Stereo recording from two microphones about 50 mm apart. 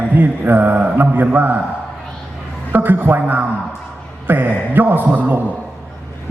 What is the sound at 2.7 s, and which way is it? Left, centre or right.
Mantra, right.